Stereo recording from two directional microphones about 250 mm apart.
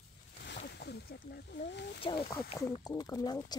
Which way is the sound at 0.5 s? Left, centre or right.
Left.